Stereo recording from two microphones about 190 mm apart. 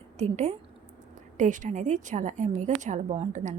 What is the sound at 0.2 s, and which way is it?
A woman's voice, 35° right (ahead or behind).